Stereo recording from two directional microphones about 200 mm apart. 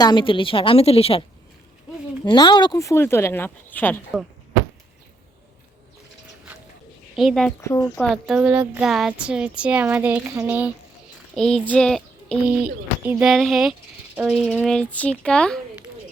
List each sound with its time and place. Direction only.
0.0 s a woman's voice: 25° left (ahead or behind)
2.2 s speech: 20° left (ahead or behind)
7.2 s speech: centre (ahead or behind)
7.6 s speech: 15° left (ahead or behind)
7.9 s speech: centre (ahead or behind)